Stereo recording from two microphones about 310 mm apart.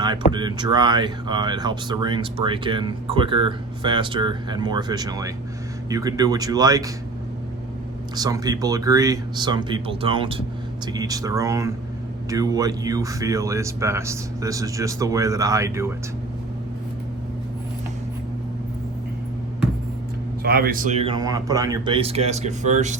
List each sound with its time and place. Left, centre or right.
0.3 s speech: centre
8.1 s speech: centre
20.4 s speech: right